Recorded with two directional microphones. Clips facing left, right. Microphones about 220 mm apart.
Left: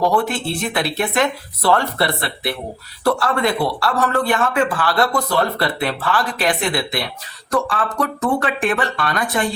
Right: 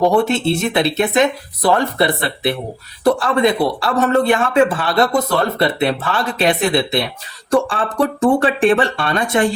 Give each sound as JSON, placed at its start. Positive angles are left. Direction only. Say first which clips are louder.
{"t": 0.0, "sound": "speech", "louder": "right 4 dB", "side_deg": -25}